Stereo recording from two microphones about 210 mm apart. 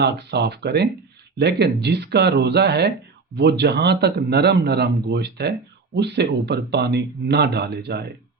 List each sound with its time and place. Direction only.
0.0 s speech: 50° right (ahead or behind)